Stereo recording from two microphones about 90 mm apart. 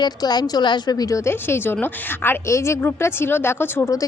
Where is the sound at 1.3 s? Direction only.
25° left (ahead or behind).